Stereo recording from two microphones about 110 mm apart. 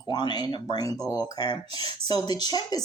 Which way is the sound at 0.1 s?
45° left (ahead or behind).